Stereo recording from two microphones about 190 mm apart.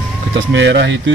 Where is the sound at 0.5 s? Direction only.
65° right (ahead or behind).